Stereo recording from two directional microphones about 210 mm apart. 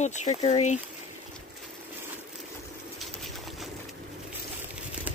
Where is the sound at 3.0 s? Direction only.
Centre (ahead or behind).